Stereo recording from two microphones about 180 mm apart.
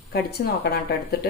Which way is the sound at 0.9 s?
60° left (ahead or behind).